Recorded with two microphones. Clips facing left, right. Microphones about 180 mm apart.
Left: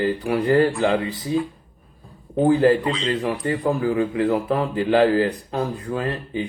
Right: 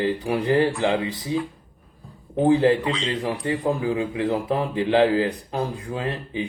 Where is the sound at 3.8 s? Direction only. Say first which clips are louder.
Left 3 dB; 20° right (ahead or behind).